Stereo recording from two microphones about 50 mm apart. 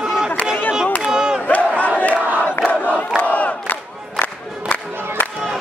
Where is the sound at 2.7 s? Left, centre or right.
Left.